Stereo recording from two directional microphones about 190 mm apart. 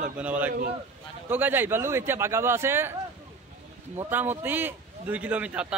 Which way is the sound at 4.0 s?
10° right (ahead or behind).